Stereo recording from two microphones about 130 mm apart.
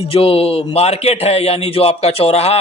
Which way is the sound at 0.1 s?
45° left (ahead or behind).